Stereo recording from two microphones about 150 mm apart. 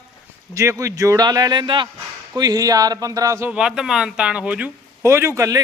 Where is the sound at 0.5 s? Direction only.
20° right (ahead or behind).